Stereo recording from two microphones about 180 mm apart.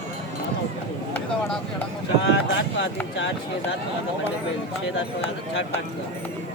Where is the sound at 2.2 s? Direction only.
90° left.